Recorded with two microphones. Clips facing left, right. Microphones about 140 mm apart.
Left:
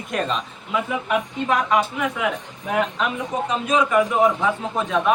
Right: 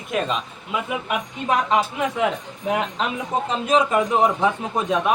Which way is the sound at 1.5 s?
25° right (ahead or behind).